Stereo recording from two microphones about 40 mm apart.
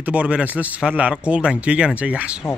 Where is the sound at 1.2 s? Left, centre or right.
Right.